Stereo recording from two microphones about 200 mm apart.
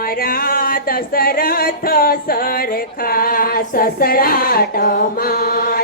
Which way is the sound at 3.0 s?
45° left (ahead or behind).